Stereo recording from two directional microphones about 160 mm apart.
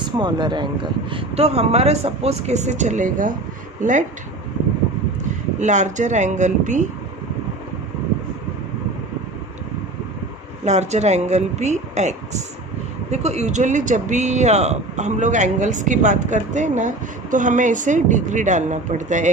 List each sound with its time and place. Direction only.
0.2 s speech: 30° right (ahead or behind); by 4.0 s 50° right (ahead or behind)
5.5 s speech: 50° right (ahead or behind)
10.7 s speech: 45° right (ahead or behind)